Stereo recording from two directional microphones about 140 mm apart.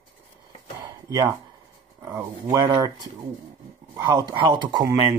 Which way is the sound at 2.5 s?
30° right (ahead or behind).